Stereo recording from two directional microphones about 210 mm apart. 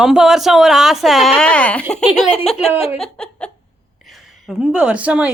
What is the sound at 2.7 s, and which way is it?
Speech, 10° right (ahead or behind).